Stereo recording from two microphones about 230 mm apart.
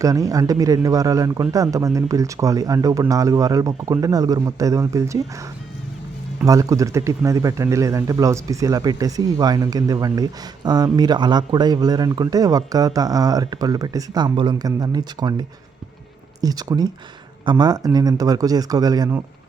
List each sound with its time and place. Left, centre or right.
0.0 s a man's voice: centre
6.4 s a man's voice: centre